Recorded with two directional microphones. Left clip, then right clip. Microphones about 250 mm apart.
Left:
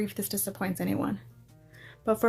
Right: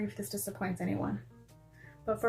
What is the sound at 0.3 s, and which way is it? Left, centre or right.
Speech, left.